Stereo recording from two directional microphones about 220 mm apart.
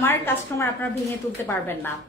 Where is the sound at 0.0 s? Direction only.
10° left (ahead or behind).